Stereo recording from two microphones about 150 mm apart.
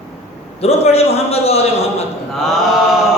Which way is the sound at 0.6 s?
40° left (ahead or behind).